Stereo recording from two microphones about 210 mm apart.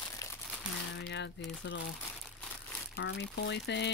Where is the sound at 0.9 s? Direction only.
55° left (ahead or behind).